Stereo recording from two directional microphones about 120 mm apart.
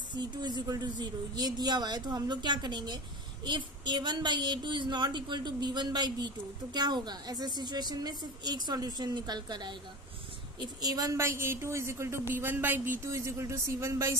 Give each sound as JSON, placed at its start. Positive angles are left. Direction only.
{"t": 0.1, "sound": "a woman's voice", "side_deg": -35}
{"t": 10.8, "sound": "speech", "side_deg": -30}